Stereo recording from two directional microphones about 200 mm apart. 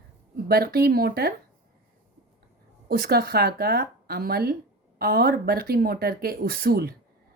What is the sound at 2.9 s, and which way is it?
A woman's voice, 50° right (ahead or behind).